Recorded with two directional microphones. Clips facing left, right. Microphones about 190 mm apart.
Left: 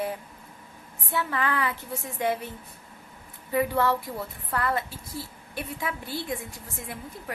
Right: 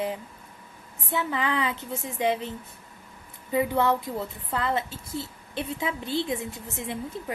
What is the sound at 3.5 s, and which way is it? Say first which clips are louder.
A woman's voice: right 1 dB; 20° right (ahead or behind).